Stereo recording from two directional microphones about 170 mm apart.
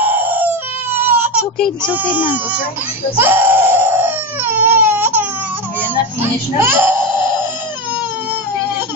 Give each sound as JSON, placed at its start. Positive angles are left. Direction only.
{"t": 0.0, "sound": "baby cry", "side_deg": -10}
{"t": 1.8, "sound": "speech", "side_deg": -10}
{"t": 3.2, "sound": "crying", "side_deg": -10}
{"t": 6.6, "sound": "speech", "side_deg": -10}